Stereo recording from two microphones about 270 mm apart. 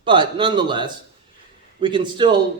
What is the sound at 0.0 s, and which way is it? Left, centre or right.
Speech, centre.